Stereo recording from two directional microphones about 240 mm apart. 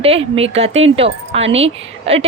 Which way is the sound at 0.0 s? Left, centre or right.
Right.